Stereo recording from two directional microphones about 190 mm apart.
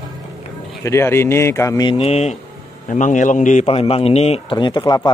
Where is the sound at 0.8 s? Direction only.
15° left (ahead or behind).